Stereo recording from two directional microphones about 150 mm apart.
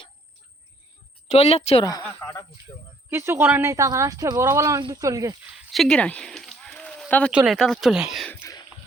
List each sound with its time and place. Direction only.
1.3 s speech: 45° left (ahead or behind)
2.1 s speech: 10° left (ahead or behind)
3.1 s speech: 15° right (ahead or behind)
5.5 s a sound: centre (ahead or behind)
7.1 s speech: 10° left (ahead or behind)
7.3 s speech: 5° right (ahead or behind)